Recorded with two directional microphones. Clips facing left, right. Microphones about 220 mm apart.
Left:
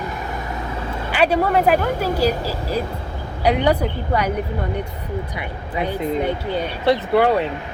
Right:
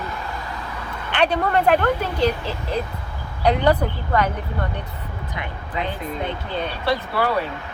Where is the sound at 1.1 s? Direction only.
5° left (ahead or behind).